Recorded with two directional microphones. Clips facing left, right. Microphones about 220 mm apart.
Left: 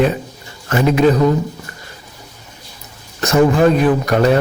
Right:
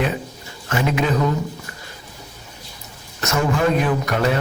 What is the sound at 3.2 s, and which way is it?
A man's voice, 35° left (ahead or behind).